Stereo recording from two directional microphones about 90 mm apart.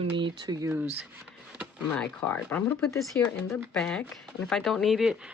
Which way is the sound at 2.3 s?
20° left (ahead or behind).